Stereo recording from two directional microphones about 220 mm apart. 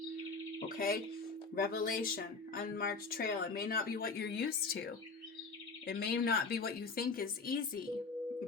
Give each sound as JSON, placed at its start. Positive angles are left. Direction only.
{"t": 0.7, "sound": "speech", "side_deg": 45}